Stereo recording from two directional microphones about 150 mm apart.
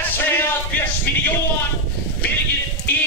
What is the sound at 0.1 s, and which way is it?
Music, 15° left (ahead or behind).